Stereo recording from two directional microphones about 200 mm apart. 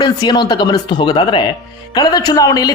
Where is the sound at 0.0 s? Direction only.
20° left (ahead or behind).